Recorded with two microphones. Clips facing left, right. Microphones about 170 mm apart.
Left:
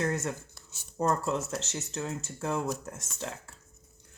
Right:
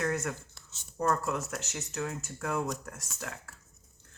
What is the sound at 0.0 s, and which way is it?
Writing, 25° left (ahead or behind).